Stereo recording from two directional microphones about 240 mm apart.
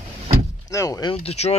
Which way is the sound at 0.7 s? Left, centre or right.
Centre.